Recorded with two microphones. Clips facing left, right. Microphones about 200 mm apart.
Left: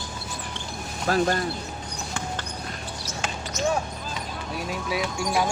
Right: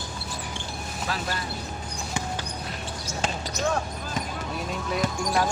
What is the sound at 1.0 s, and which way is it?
Speech, 50° left (ahead or behind).